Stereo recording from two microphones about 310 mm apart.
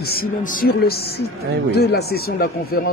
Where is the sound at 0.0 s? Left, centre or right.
Left.